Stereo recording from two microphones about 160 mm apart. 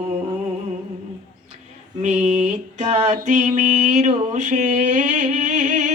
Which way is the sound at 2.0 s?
50° right (ahead or behind).